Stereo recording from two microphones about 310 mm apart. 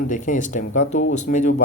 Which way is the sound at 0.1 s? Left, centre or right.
Left.